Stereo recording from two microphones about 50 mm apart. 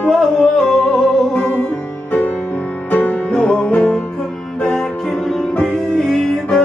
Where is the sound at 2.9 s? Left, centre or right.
Left.